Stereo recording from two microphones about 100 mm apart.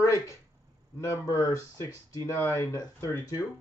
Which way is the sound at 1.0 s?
30° left (ahead or behind).